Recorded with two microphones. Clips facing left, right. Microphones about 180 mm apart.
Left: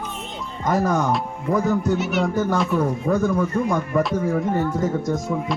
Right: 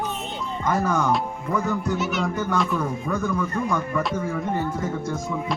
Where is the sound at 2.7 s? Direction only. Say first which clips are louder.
Left 6 dB; 35° left (ahead or behind).